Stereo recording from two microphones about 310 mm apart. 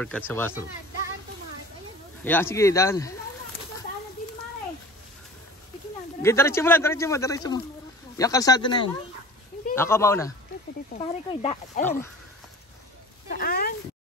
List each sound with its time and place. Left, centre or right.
0.0 s speech: centre
2.2 s speech: centre
6.2 s speech: centre
11.0 s speech: centre
11.8 s speech: centre
13.3 s a sound: left